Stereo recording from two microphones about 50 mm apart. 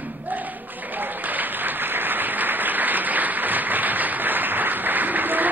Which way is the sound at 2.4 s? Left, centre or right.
Right.